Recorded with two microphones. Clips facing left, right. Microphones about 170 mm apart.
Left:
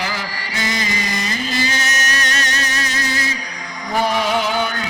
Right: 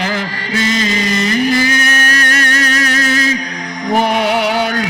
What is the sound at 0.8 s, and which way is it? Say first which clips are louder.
Music: right 8 dB; 20° left (ahead or behind).